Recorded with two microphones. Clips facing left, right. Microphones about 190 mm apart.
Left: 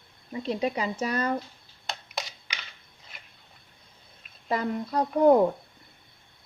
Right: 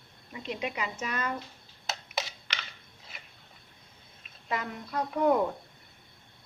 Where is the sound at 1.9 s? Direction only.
5° right (ahead or behind).